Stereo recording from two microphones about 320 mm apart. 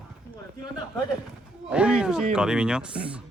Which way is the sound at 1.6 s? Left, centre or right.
Centre.